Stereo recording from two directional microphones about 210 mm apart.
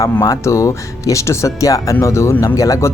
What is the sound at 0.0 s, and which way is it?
Speech, 15° left (ahead or behind).